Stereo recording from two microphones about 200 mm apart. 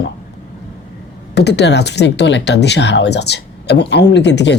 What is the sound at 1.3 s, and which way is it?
Speech, 55° left (ahead or behind).